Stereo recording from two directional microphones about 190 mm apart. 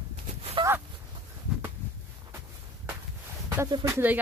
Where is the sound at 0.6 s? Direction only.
25° right (ahead or behind).